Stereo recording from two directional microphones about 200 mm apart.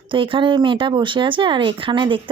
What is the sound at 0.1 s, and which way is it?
Speech, 25° right (ahead or behind).